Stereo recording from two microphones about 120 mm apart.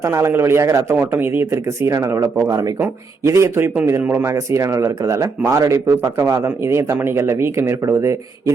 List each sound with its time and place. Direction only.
0.1 s a man's voice: 25° right (ahead or behind)